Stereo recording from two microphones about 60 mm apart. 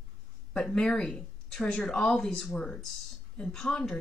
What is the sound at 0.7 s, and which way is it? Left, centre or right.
Speech, centre.